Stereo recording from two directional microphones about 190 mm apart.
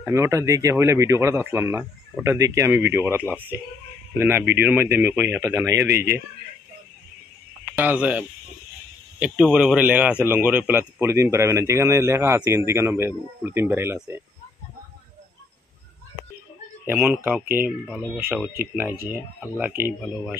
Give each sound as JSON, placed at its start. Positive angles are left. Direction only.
{"t": 0.0, "sound": "a man's voice", "side_deg": -15}
{"t": 5.9, "sound": "speech", "side_deg": -60}
{"t": 7.7, "sound": "a man's voice", "side_deg": -10}
{"t": 16.8, "sound": "a man's voice", "side_deg": -10}
{"t": 19.4, "sound": "a man's voice", "side_deg": -5}